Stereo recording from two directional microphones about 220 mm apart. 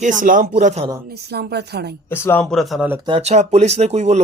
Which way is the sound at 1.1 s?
45° right (ahead or behind).